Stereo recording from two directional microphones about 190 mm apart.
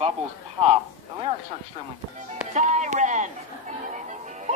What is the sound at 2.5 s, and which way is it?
Speech, 40° right (ahead or behind).